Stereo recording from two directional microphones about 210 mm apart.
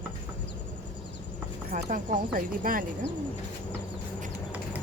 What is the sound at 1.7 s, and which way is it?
A woman's voice, 40° right (ahead or behind).